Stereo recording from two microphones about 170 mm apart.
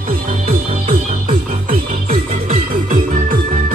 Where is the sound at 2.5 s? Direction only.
40° right (ahead or behind).